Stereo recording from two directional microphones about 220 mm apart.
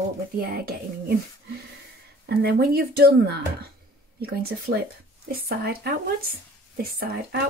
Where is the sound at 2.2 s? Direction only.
45° right (ahead or behind).